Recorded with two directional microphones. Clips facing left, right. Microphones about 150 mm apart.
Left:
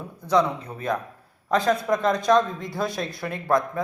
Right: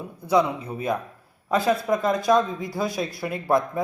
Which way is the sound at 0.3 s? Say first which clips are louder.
Even; 10° right (ahead or behind).